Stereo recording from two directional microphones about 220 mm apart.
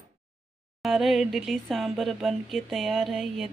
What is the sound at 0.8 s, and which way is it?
Speech, centre (ahead or behind).